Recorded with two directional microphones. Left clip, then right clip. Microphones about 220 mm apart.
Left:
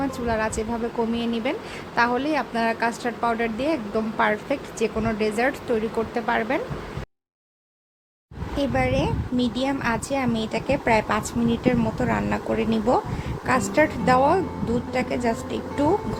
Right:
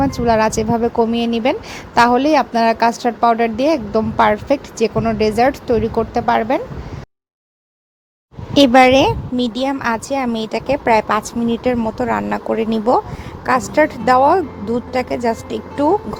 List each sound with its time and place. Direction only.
0.0 s a woman's voice: 30° right (ahead or behind)
8.5 s a woman's voice: 40° right (ahead or behind)